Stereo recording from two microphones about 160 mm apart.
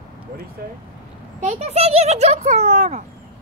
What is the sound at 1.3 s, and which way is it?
Speech, 45° right (ahead or behind).